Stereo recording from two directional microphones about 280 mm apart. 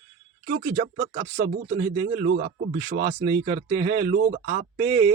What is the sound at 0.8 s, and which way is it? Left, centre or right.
Speech, right.